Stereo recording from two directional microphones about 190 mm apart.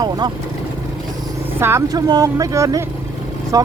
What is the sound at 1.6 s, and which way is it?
Speech, 15° right (ahead or behind).